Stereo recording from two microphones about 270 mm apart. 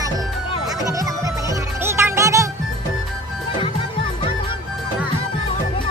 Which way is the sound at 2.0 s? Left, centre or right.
Centre.